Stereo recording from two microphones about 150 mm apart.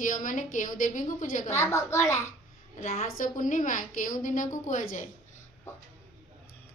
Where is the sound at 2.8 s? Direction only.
55° left (ahead or behind).